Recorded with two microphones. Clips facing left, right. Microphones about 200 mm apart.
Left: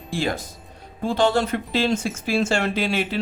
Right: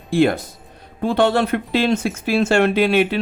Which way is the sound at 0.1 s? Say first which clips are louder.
Right 9 dB; 60° right (ahead or behind).